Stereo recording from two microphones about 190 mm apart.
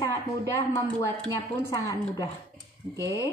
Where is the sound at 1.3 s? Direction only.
20° left (ahead or behind).